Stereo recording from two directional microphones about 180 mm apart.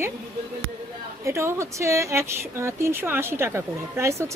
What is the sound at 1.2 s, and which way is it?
Speech, 15° right (ahead or behind).